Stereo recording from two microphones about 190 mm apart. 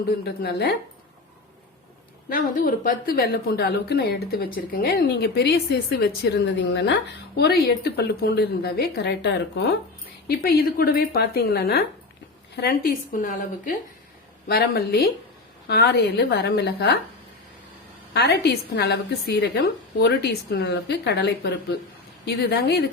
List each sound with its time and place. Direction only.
0.3 s a woman's voice: 60° left (ahead or behind)
2.3 s a woman's voice: 50° left (ahead or behind)
14.4 s a woman's voice: 55° left (ahead or behind)
18.1 s a woman's voice: 60° left (ahead or behind)